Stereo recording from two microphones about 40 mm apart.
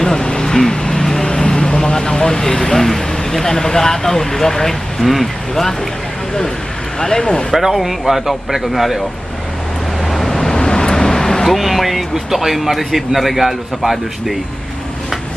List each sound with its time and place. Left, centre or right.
0.0 s vehicle: centre
7.0 s speech: centre
7.5 s speech: centre
10.1 s vehicle: centre
11.4 s speech: centre